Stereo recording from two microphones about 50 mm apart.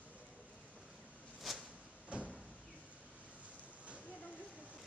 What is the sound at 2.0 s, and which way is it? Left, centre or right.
Vehicle, right.